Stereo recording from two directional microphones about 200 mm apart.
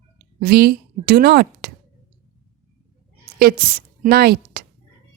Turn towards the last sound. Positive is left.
turn(degrees=-50)  # may be behind; listen again after turning